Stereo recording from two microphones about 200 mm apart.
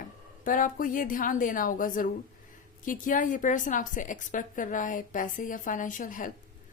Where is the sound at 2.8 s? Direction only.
40° left (ahead or behind).